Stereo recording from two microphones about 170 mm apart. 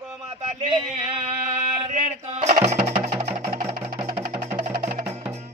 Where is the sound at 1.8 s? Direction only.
40° right (ahead or behind).